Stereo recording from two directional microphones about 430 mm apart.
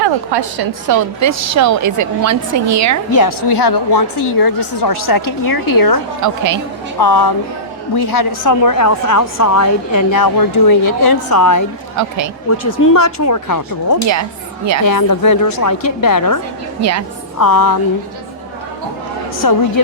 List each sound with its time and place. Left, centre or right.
0.0 s a woman's voice: right
3.1 s a woman's voice: left
6.2 s a woman's voice: right
7.0 s a woman's voice: left
8.4 s a woman's voice: left
11.9 s a woman's voice: right
12.5 s a woman's voice: left
14.1 s a woman's voice: right
14.8 s a woman's voice: left
16.8 s a woman's voice: right
17.3 s a woman's voice: left
19.4 s a woman's voice: left